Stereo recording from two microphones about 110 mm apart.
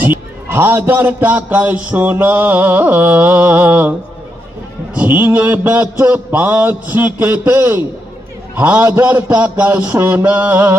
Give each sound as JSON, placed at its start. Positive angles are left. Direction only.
{"t": 0.0, "sound": "a man's voice", "side_deg": -20}
{"t": 4.9, "sound": "a man's voice", "side_deg": -15}